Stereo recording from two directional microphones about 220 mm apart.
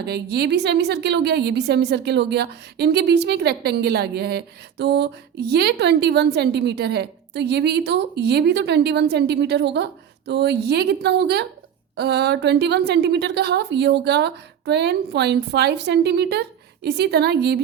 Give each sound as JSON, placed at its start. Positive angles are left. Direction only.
{"t": 0.0, "sound": "a woman's voice", "side_deg": -45}